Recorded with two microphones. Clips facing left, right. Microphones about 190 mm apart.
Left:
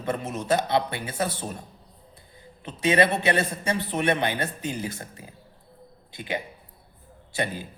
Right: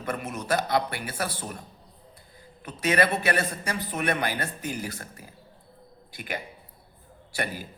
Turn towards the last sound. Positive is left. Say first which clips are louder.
# left 3 dB
turn(degrees=20)  # may be behind; listen again after turning